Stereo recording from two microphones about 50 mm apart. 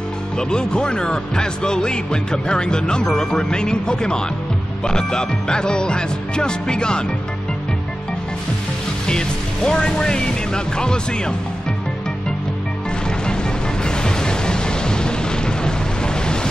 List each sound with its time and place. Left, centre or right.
0.4 s speech: centre
9.7 s speech: centre
13.8 s a sound: centre